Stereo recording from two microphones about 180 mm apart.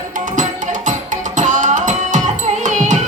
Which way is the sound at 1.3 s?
45° right (ahead or behind).